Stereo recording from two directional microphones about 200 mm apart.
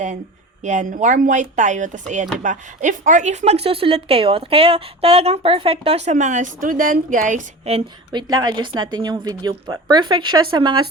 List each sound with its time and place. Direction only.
0.6 s speech: 40° right (ahead or behind); by 10.8 s 20° right (ahead or behind)